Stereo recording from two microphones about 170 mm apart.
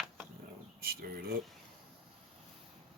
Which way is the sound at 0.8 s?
60° right (ahead or behind).